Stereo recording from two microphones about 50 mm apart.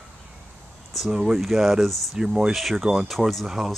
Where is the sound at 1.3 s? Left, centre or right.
Centre.